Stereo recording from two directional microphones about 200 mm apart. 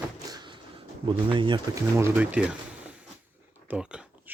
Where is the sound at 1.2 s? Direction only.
25° right (ahead or behind).